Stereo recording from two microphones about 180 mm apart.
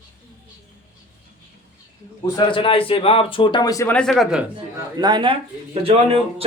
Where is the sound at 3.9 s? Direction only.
5° left (ahead or behind).